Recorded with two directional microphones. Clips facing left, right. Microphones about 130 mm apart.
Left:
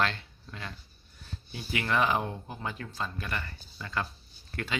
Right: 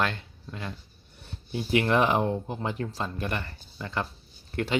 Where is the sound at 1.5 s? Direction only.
40° right (ahead or behind).